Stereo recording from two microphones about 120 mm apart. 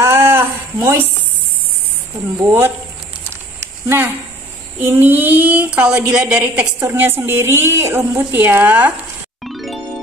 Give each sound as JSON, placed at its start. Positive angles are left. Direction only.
{"t": 0.0, "sound": "a sound", "side_deg": -20}
{"t": 2.3, "sound": "a woman's voice", "side_deg": -20}
{"t": 3.8, "sound": "a woman's voice", "side_deg": -20}
{"t": 9.4, "sound": "music", "side_deg": 0}